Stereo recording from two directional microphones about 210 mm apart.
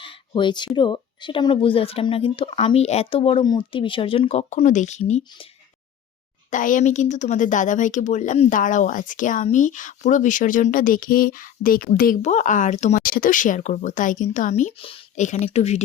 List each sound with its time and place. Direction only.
0.0 s speech: 25° left (ahead or behind)
6.5 s speech: 40° left (ahead or behind)